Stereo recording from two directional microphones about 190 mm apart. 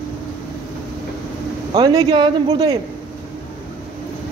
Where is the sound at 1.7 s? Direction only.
20° right (ahead or behind).